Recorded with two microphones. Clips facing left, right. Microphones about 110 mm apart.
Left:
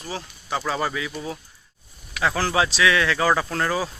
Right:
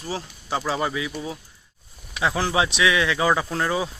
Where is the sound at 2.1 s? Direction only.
15° right (ahead or behind).